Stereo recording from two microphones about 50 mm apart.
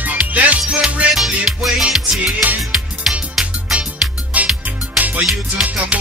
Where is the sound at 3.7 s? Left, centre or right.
Right.